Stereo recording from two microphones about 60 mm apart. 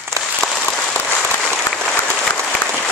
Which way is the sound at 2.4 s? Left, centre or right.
Left.